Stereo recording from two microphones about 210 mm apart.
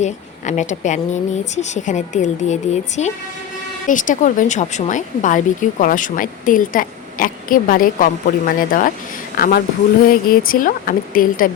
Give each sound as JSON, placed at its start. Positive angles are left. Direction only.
{"t": 0.0, "sound": "a woman's voice", "side_deg": 35}